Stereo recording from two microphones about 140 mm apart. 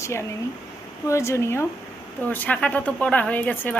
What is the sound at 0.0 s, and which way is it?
A woman's voice, 20° left (ahead or behind).